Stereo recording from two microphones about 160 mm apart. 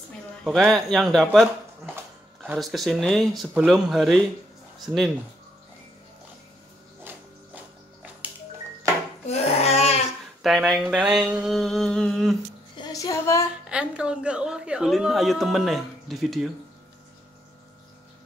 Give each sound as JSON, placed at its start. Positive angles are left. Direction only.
{"t": 0.4, "sound": "a woman's voice", "side_deg": 0}
{"t": 2.5, "sound": "a woman's voice", "side_deg": 0}
{"t": 9.3, "sound": "babbling", "side_deg": 40}
{"t": 10.4, "sound": "a woman's voice", "side_deg": 0}
{"t": 12.7, "sound": "a woman's voice", "side_deg": 25}
{"t": 13.7, "sound": "a woman's voice", "side_deg": -5}